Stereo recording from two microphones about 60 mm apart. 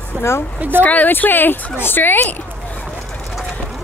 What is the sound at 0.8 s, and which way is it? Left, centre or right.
Speech, left.